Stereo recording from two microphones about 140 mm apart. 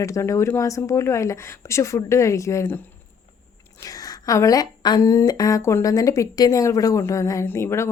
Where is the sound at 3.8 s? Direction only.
25° left (ahead or behind).